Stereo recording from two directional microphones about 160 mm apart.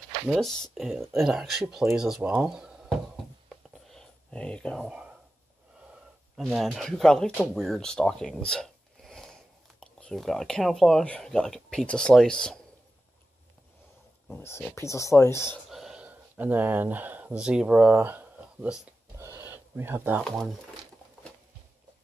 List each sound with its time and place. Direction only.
0.3 s speech: centre (ahead or behind)
3.4 s a sound: 5° left (ahead or behind)
4.8 s speech: 5° right (ahead or behind)
6.3 s speech: centre (ahead or behind)
14.3 s speech: 15° left (ahead or behind)
15.7 s a sound: 5° right (ahead or behind)
20.2 s speech: centre (ahead or behind)